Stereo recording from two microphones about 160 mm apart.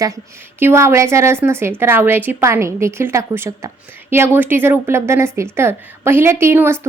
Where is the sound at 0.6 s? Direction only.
15° right (ahead or behind).